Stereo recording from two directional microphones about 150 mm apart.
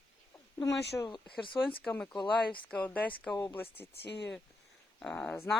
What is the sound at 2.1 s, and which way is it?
Speech, 30° left (ahead or behind).